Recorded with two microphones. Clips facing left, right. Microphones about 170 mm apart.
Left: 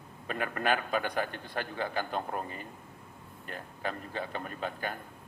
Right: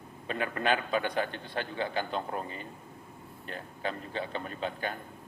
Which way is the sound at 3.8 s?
45° left (ahead or behind).